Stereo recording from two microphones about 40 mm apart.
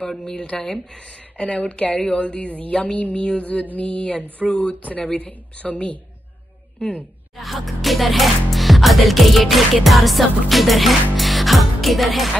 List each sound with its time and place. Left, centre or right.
0.2 s speech: left
2.4 s a sound: left
7.3 s music: centre